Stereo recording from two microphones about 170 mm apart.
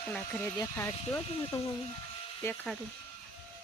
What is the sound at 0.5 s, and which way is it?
Speech, 15° left (ahead or behind).